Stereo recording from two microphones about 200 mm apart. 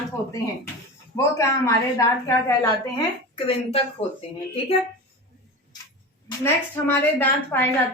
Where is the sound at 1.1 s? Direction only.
15° left (ahead or behind).